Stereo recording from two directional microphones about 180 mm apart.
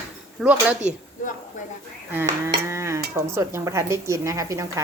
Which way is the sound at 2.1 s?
10° right (ahead or behind).